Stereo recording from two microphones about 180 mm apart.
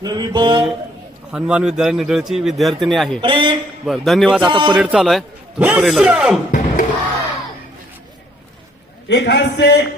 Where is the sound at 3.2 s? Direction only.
30° right (ahead or behind).